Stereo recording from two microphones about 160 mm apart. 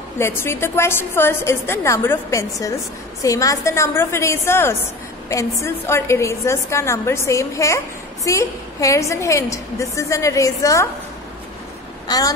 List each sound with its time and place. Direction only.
0.2 s a woman's voice: 15° left (ahead or behind)
12.1 s a woman's voice: 25° left (ahead or behind)